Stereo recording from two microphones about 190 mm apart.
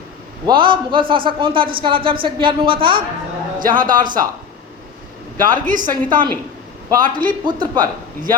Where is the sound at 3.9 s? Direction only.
45° right (ahead or behind).